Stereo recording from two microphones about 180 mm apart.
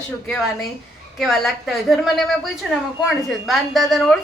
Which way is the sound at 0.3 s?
Centre (ahead or behind).